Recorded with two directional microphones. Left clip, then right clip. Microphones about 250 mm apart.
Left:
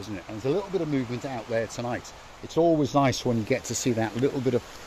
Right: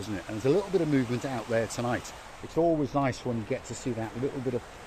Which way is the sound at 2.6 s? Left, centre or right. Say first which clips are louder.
Left 4 dB; left.